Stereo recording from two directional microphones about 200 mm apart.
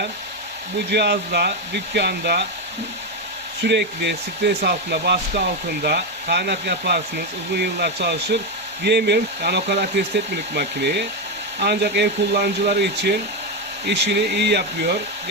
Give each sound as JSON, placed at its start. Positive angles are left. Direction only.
{"t": 0.9, "sound": "speech", "side_deg": -55}
{"t": 3.6, "sound": "speech", "side_deg": -60}